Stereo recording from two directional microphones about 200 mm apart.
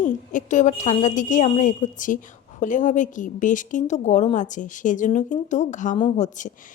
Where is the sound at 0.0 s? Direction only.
40° left (ahead or behind).